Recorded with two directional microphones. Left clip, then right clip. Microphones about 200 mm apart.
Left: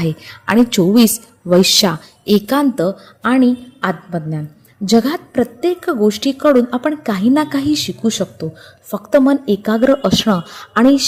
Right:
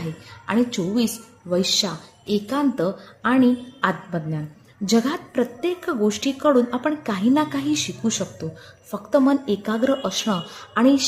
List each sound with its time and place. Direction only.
0.0 s a woman's voice: 40° left (ahead or behind)
2.7 s a woman's voice: 25° left (ahead or behind)